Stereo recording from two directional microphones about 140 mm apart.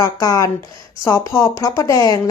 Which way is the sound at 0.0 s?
25° left (ahead or behind).